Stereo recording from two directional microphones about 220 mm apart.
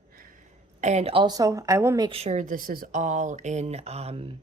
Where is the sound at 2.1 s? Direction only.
30° right (ahead or behind).